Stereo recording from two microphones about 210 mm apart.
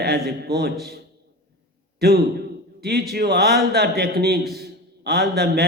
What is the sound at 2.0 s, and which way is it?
A man's voice, 50° right (ahead or behind).